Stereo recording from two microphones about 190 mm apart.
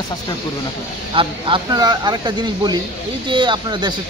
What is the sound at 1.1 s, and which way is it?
A man's voice, 25° right (ahead or behind).